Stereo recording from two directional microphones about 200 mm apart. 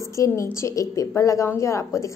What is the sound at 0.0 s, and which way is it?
A woman's voice, 15° left (ahead or behind).